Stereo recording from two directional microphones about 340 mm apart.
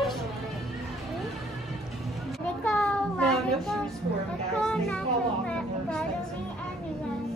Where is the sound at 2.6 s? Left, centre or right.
Centre.